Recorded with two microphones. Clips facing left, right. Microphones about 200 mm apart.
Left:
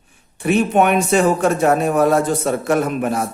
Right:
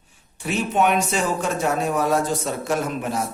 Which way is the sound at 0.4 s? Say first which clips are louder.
Left 6 dB; 60° left (ahead or behind).